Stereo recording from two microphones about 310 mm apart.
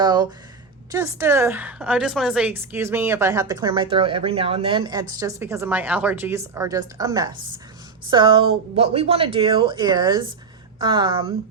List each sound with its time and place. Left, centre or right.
0.0 s a woman's voice: centre